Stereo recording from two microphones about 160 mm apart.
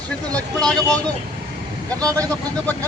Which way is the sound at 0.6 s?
5° left (ahead or behind).